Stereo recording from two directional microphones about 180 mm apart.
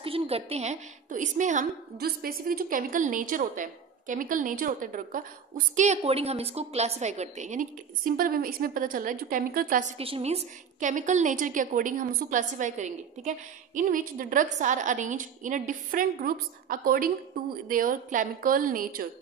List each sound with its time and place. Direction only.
0.0 s a woman's voice: 30° right (ahead or behind)
2.0 s a woman's voice: 55° right (ahead or behind)
5.8 s a woman's voice: 35° right (ahead or behind)
9.9 s a woman's voice: 35° right (ahead or behind); by 19.0 s 50° right (ahead or behind)